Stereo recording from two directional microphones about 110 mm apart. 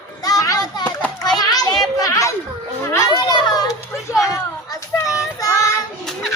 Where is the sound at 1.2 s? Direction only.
35° left (ahead or behind).